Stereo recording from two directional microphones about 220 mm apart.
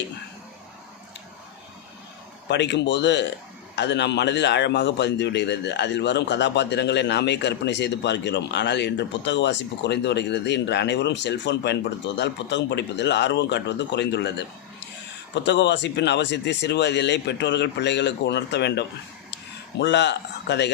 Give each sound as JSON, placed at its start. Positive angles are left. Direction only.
{"t": 2.5, "sound": "a man's voice", "side_deg": 50}
{"t": 15.4, "sound": "a man's voice", "side_deg": 50}